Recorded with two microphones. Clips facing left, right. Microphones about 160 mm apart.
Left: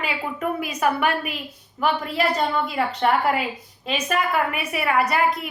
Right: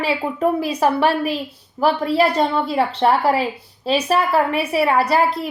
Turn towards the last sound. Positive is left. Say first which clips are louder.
# right 4 dB
turn(degrees=-30)  # may be behind; listen again after turning